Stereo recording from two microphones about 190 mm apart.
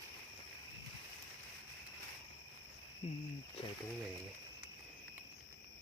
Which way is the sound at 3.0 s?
35° left (ahead or behind).